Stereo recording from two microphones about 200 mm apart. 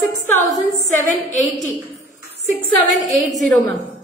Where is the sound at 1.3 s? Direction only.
40° left (ahead or behind).